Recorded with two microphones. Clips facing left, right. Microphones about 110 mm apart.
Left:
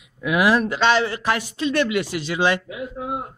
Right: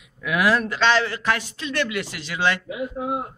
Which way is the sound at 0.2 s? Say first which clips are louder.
Left 3 dB; 15° left (ahead or behind).